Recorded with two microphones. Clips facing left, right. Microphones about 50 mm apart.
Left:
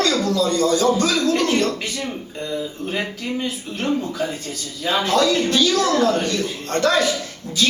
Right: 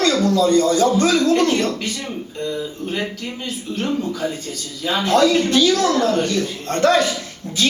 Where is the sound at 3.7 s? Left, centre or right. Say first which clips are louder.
Right 3 dB; centre.